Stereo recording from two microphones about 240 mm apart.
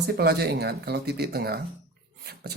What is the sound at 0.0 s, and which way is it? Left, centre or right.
Speech, right.